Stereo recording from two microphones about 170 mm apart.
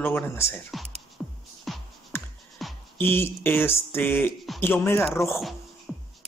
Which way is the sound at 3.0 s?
15° left (ahead or behind).